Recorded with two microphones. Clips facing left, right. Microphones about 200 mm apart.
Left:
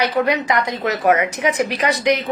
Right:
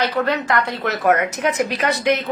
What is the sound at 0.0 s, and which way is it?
A woman's voice, 15° left (ahead or behind).